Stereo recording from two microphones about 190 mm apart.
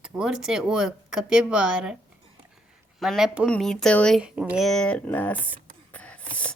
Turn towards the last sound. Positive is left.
turn(degrees=5)  # may be behind; listen again after turning